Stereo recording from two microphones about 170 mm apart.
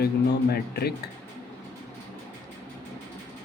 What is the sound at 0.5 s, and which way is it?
Speech, 70° left (ahead or behind).